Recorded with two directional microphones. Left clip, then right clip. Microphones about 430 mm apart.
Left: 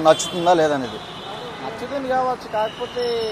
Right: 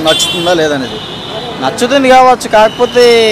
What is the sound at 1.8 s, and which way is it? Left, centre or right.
Speech, right.